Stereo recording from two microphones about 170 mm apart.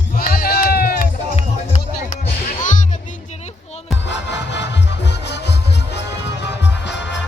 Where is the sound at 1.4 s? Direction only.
40° left (ahead or behind).